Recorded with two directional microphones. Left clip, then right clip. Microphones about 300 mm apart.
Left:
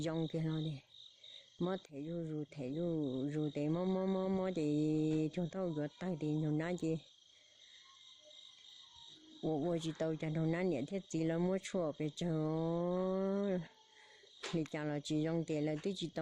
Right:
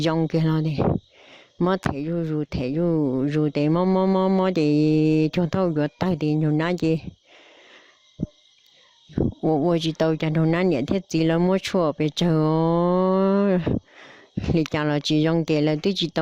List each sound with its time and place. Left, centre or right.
0.0 s speech: right
9.4 s speech: right